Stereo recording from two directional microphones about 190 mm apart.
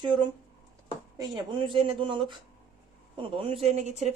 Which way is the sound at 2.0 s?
25° right (ahead or behind).